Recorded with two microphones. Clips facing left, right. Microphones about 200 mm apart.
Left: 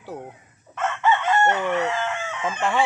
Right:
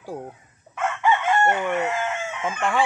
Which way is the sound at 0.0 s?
10° right (ahead or behind).